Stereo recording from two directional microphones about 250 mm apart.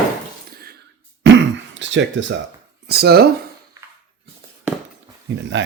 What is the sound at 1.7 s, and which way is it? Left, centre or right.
A man's voice, right.